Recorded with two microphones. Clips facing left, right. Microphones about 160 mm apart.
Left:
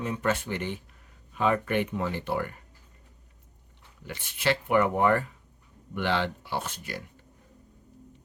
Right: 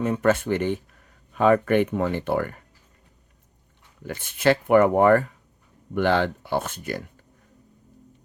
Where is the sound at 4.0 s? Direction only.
45° right (ahead or behind).